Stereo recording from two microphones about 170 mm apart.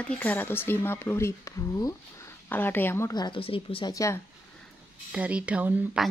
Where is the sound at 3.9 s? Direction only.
20° left (ahead or behind).